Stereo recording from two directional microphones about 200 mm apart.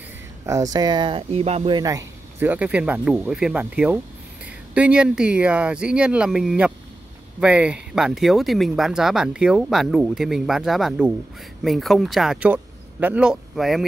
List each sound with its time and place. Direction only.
0.5 s speech: 15° right (ahead or behind)
1.8 s speech: 15° right (ahead or behind); by 13.8 s centre (ahead or behind)